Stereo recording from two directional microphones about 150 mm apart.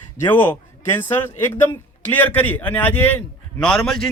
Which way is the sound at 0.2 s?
15° left (ahead or behind).